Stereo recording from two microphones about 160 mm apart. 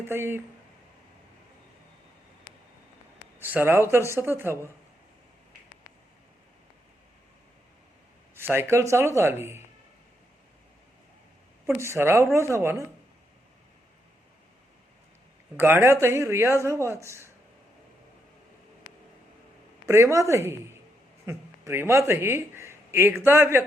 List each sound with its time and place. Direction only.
0.0 s a man's voice: 15° right (ahead or behind)
3.3 s a man's voice: 10° right (ahead or behind)
8.4 s a man's voice: 15° right (ahead or behind)
11.8 s a man's voice: 15° right (ahead or behind)
15.5 s a man's voice: 15° right (ahead or behind)
19.8 s a man's voice: 20° right (ahead or behind)